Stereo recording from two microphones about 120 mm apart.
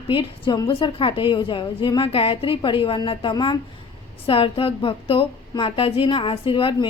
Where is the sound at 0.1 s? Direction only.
45° left (ahead or behind).